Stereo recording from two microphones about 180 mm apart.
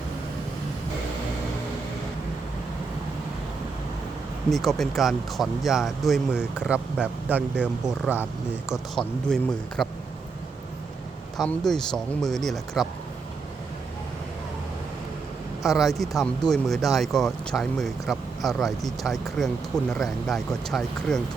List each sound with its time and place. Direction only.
4.4 s speech: centre (ahead or behind)
9.2 s speech: centre (ahead or behind)
11.3 s speech: centre (ahead or behind)
15.6 s speech: centre (ahead or behind)